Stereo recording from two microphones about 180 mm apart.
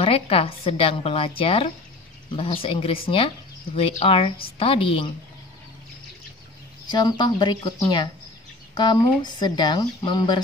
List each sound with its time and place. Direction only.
0.0 s a woman's voice: 30° left (ahead or behind)
6.9 s speech: 20° left (ahead or behind)